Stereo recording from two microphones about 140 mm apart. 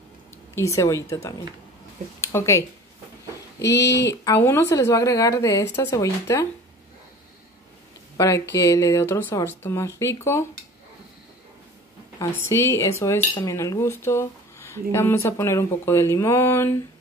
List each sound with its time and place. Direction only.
0.6 s cutlery: 25° left (ahead or behind)
2.2 s speech: 20° left (ahead or behind)
4.1 s cutlery: 20° left (ahead or behind)
8.2 s cutlery: 20° left (ahead or behind)
12.4 s cutlery: 20° left (ahead or behind)